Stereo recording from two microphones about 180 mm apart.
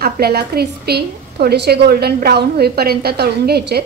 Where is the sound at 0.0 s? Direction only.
60° right (ahead or behind).